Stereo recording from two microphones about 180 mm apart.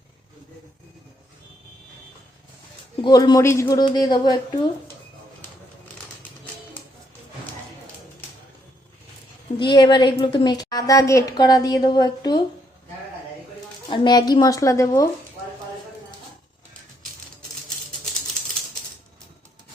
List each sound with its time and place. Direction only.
3.0 s a woman's voice: 20° left (ahead or behind)
9.6 s a woman's voice: 25° left (ahead or behind)
13.8 s a woman's voice: 25° left (ahead or behind)